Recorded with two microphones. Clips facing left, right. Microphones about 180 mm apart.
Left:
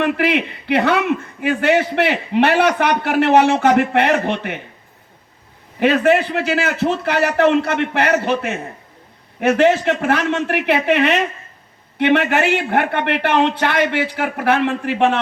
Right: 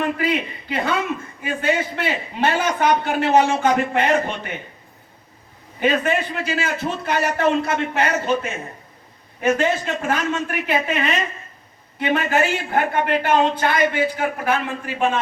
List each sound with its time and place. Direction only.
0.0 s a man's voice: 80° left
5.8 s a man's voice: 75° left (ahead or behind)